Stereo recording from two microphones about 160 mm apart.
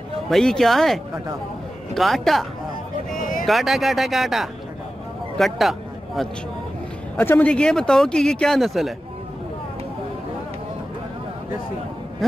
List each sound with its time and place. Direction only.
0.3 s a man's voice: 5° left (ahead or behind)
3.2 s a sound: 60° left (ahead or behind)
3.4 s a man's voice: centre (ahead or behind)
7.2 s a man's voice: 10° left (ahead or behind)
12.2 s speech: centre (ahead or behind)